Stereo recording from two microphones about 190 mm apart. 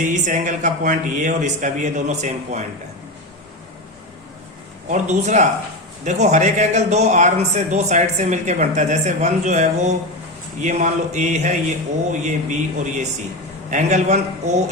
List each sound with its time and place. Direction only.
0.0 s a man's voice: 40° right (ahead or behind)
4.9 s a man's voice: 40° right (ahead or behind)